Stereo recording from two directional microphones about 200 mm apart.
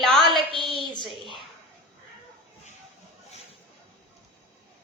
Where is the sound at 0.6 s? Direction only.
25° left (ahead or behind).